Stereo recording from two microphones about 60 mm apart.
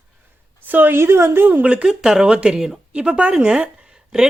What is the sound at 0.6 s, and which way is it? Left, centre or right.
Speech, right.